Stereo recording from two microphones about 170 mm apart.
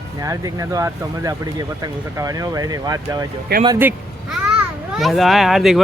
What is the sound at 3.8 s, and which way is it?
A child's voice, 10° right (ahead or behind).